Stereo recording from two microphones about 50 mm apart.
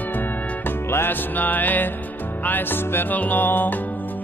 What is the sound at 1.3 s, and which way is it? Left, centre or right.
Music, left.